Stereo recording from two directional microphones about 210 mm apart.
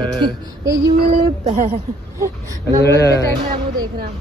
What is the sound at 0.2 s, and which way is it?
Child singing, 20° right (ahead or behind).